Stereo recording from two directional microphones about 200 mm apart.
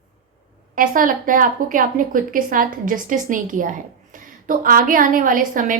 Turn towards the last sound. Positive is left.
turn(degrees=-40)  # may be behind; listen again after turning